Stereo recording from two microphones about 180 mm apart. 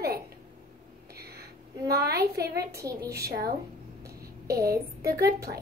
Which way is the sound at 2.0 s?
60° right (ahead or behind).